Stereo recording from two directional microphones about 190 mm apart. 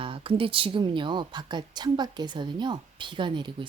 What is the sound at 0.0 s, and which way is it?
A woman's voice, 30° right (ahead or behind).